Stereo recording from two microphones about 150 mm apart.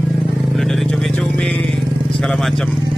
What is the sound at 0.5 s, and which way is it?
Vehicle, centre (ahead or behind).